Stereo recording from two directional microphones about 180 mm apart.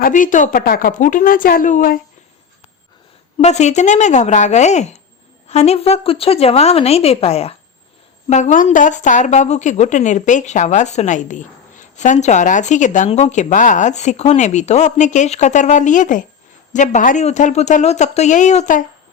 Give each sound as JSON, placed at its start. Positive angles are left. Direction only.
{"t": 0.0, "sound": "a woman's voice", "side_deg": 45}
{"t": 3.3, "sound": "a woman's voice", "side_deg": 40}